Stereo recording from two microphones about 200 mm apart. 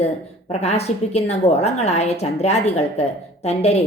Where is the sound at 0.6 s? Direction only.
30° left (ahead or behind).